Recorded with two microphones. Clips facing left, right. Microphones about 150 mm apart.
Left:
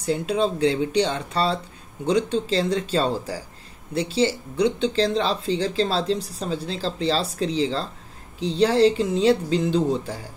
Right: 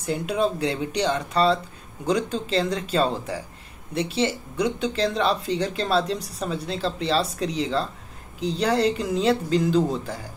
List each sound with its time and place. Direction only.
0.0 s speech: 30° left (ahead or behind)